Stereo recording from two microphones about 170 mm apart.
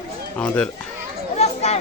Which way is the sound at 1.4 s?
40° left (ahead or behind).